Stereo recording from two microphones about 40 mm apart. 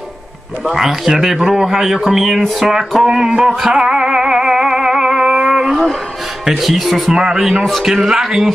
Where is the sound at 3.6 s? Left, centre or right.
Centre.